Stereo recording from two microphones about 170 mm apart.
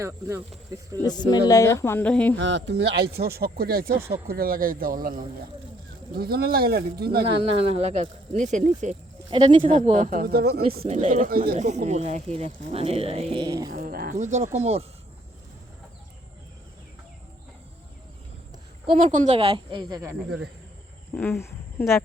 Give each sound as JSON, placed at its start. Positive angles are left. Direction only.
{"t": 0.0, "sound": "speech", "side_deg": -15}
{"t": 1.0, "sound": "speech", "side_deg": 25}
{"t": 2.4, "sound": "speech", "side_deg": -90}
{"t": 7.7, "sound": "speech", "side_deg": -35}
{"t": 9.3, "sound": "speech", "side_deg": -30}
{"t": 9.7, "sound": "speech", "side_deg": -40}
{"t": 10.8, "sound": "speech", "side_deg": -40}
{"t": 11.5, "sound": "a woman's voice", "side_deg": -45}
{"t": 13.7, "sound": "a woman's voice", "side_deg": -55}
{"t": 18.9, "sound": "a woman's voice", "side_deg": -45}
{"t": 21.1, "sound": "speech", "side_deg": 15}